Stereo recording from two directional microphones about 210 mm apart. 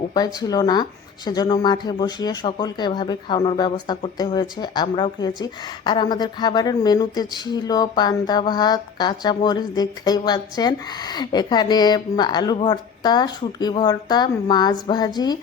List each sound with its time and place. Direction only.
0.1 s speech: 20° left (ahead or behind)